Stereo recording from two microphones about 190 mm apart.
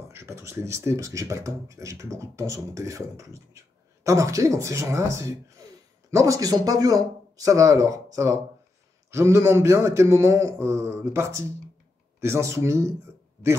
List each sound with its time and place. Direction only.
0.1 s speech: 15° right (ahead or behind)